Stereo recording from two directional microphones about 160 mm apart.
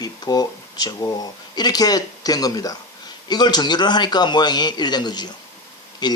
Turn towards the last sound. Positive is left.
turn(degrees=25)  # may be behind; listen again after turning